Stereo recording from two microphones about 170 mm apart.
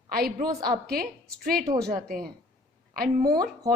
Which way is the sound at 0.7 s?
60° right (ahead or behind).